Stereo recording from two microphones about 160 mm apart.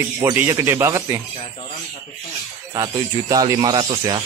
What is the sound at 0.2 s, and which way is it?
Speech, 15° right (ahead or behind).